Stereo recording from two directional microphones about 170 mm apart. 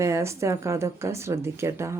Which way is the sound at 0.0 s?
15° right (ahead or behind).